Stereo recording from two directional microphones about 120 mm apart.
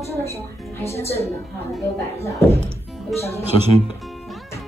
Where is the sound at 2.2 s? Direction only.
25° left (ahead or behind).